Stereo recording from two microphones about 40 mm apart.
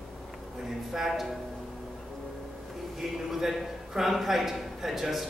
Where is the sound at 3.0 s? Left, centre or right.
Centre.